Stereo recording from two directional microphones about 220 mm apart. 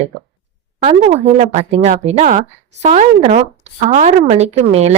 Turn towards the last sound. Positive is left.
turn(degrees=-30)  # may be behind; listen again after turning